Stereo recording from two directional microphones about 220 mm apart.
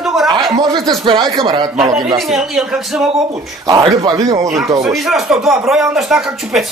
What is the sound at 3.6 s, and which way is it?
Speech, 20° right (ahead or behind).